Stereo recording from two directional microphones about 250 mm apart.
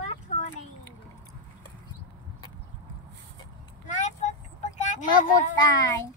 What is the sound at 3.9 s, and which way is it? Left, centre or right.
Vehicle, left.